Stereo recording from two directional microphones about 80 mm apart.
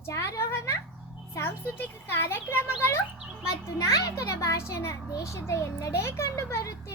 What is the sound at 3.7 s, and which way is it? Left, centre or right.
A child's voice, left.